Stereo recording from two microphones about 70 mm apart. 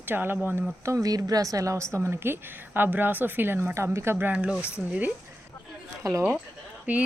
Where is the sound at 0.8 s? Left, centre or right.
Right.